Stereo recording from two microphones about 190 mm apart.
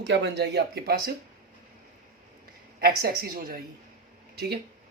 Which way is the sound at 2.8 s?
55° right (ahead or behind).